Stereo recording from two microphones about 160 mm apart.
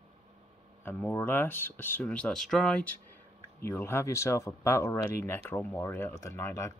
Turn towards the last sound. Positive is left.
turn(degrees=15)  # may be behind; listen again after turning